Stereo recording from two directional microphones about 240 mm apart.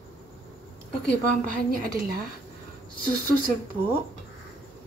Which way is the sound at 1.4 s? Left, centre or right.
Right.